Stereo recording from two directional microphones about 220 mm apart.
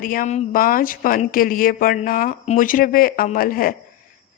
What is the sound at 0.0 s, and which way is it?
A woman's voice, 40° left (ahead or behind).